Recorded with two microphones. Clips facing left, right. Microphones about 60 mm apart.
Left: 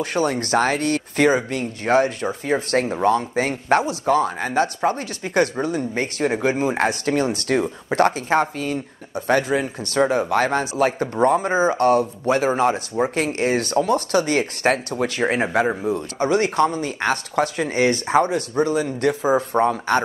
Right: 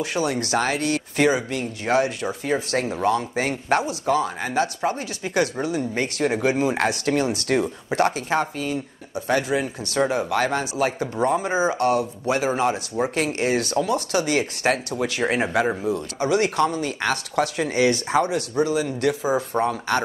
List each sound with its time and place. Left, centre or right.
0.0 s speech: left